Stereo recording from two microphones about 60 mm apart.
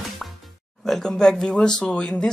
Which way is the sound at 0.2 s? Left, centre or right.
Centre.